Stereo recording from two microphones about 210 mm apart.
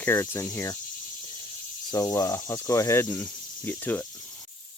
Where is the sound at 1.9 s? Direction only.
15° left (ahead or behind).